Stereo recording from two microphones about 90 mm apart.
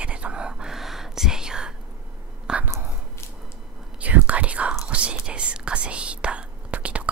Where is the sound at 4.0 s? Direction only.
15° right (ahead or behind).